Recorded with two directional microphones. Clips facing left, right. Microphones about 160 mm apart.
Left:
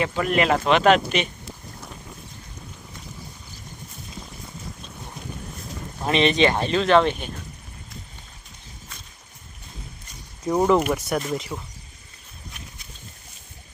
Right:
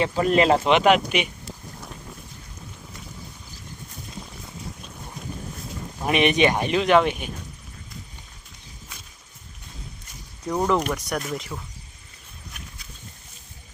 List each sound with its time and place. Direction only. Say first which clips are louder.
0.0 s speech: right 2 dB; 30° right (ahead or behind); by 1.3 s 10° right (ahead or behind)
6.1 s speech: even; 15° right (ahead or behind)
10.4 s speech: left 4 dB; 10° left (ahead or behind)